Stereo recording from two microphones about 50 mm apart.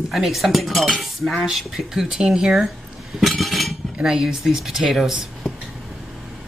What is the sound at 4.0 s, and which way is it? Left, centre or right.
Speech, centre.